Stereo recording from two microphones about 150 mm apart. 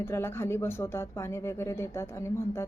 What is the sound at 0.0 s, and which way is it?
A woman's voice, 15° left (ahead or behind).